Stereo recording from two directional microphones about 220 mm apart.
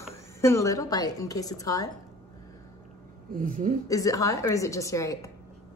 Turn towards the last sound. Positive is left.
turn(degrees=15)  # may be behind; listen again after turning